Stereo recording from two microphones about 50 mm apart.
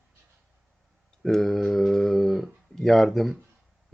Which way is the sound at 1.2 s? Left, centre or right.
Centre.